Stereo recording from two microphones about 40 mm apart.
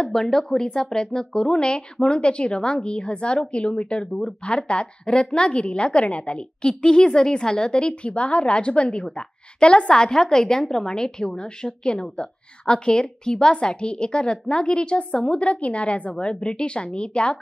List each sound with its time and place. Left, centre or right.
0.0 s a woman's voice: centre